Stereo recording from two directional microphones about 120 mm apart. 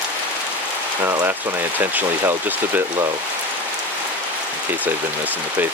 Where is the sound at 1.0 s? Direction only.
25° right (ahead or behind).